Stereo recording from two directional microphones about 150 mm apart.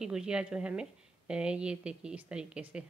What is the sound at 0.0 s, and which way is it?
A woman's voice, 5° right (ahead or behind).